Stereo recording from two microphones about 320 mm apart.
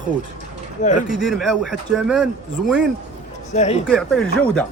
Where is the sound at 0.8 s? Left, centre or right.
Left.